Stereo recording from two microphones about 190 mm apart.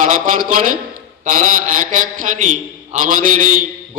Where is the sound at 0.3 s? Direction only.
45° right (ahead or behind).